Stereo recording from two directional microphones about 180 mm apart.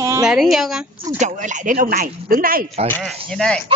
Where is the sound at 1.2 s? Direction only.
45° right (ahead or behind).